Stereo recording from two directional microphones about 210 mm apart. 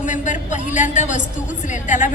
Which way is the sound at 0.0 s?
35° left (ahead or behind).